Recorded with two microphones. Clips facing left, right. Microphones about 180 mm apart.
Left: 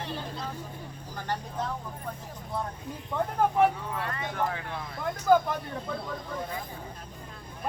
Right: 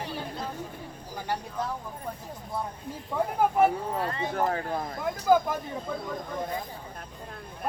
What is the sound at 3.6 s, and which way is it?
Speech, 40° right (ahead or behind).